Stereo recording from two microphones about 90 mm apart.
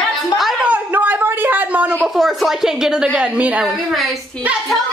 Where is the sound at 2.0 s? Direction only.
Centre (ahead or behind).